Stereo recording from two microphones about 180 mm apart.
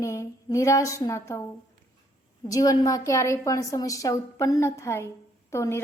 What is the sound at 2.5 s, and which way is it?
A woman's voice, 20° left (ahead or behind).